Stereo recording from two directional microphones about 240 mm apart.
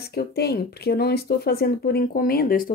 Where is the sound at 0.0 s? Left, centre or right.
Left.